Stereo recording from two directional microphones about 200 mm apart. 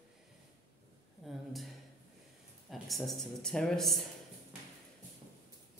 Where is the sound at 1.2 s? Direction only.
Centre (ahead or behind).